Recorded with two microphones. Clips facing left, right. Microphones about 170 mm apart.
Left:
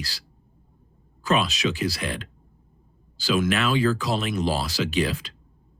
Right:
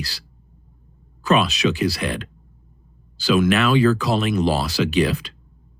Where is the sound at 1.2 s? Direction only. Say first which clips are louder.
Right 5 dB; 65° right (ahead or behind).